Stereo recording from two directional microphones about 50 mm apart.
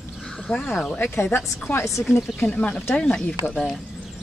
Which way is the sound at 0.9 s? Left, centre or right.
Left.